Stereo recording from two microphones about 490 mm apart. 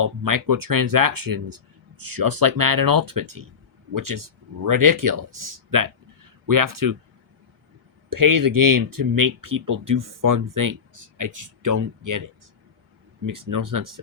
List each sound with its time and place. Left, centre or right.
0.0 s speech: right
8.1 s speech: right
13.2 s speech: right